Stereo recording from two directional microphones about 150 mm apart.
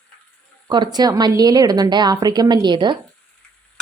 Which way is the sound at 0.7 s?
30° right (ahead or behind).